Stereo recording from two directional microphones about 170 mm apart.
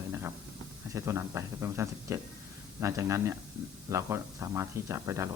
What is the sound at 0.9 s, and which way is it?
Speech, 15° right (ahead or behind).